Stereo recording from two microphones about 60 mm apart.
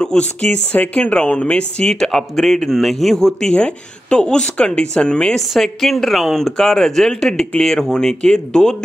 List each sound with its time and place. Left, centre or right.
0.0 s speech: centre
2.0 s speech: centre
5.4 s speech: centre